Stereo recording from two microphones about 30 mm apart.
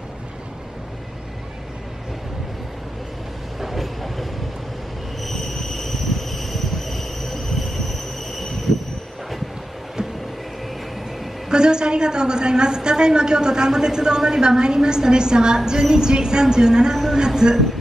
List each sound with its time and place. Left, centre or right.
3.6 s train: centre
11.4 s a woman's voice: right